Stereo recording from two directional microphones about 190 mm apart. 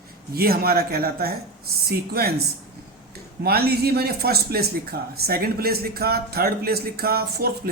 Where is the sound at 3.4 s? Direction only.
55° right (ahead or behind).